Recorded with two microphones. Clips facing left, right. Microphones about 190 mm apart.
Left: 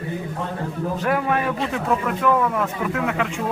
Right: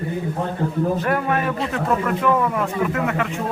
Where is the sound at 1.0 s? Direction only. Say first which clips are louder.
Even; centre (ahead or behind).